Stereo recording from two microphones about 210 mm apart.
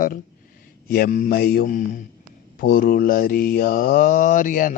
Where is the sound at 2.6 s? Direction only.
40° left (ahead or behind).